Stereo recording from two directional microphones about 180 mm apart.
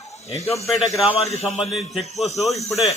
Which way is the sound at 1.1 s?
35° left (ahead or behind).